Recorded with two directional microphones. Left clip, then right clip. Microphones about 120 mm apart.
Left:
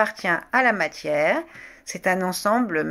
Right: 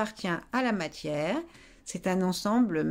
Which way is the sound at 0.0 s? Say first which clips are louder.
Left 10 dB; 60° right (ahead or behind).